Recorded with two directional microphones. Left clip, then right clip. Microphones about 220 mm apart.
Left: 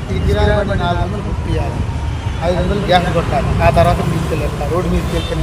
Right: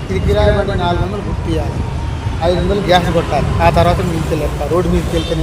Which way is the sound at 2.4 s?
50° right (ahead or behind).